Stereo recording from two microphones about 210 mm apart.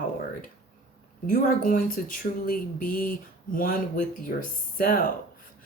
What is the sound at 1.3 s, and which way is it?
Speech, 40° left (ahead or behind).